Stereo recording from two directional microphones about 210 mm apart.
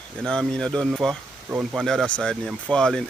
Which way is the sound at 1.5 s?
10° right (ahead or behind).